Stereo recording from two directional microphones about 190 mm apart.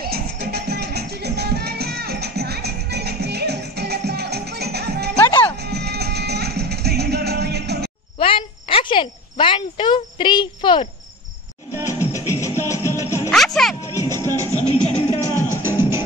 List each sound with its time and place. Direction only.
0.0 s music: 55° right (ahead or behind)
5.2 s music: 25° left (ahead or behind)
5.6 s music: 60° right (ahead or behind)
8.2 s cricket: 30° left (ahead or behind)
11.8 s music: 15° left (ahead or behind)
13.3 s music: centre (ahead or behind)
13.9 s music: 15° left (ahead or behind)
14.2 s music: 20° right (ahead or behind)
14.7 s music: 35° left (ahead or behind)
15.5 s music: 10° right (ahead or behind)